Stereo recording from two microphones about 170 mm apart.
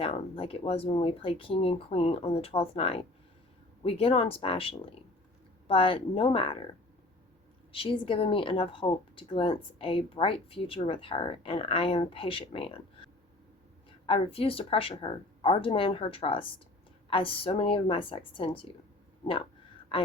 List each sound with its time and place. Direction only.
0.0 s a woman's voice: 35° left (ahead or behind)
7.7 s a woman's voice: 30° left (ahead or behind)
14.1 s a woman's voice: 35° left (ahead or behind)
19.9 s speech: 30° left (ahead or behind)